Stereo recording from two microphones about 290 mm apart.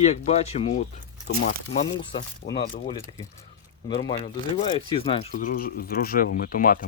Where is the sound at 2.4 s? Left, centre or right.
Left.